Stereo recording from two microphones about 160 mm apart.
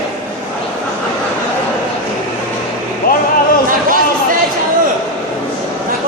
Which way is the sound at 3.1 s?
65° left (ahead or behind).